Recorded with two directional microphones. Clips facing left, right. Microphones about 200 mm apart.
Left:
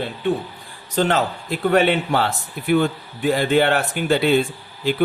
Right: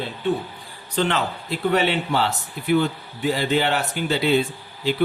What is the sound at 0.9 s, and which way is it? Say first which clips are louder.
A man's voice: left 3 dB; 45° left (ahead or behind).